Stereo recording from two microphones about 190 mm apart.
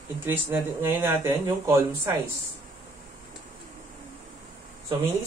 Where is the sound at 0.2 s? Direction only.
10° right (ahead or behind).